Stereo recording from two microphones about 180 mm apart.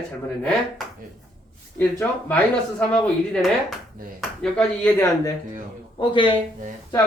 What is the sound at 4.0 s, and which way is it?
Speech, 50° right (ahead or behind).